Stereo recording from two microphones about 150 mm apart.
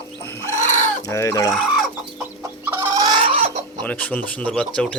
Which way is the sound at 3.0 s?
30° right (ahead or behind).